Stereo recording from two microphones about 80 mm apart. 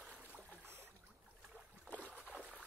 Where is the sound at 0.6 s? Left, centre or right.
Right.